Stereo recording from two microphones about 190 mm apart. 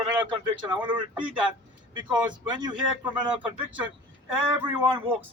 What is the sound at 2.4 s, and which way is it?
Speech, 25° right (ahead or behind).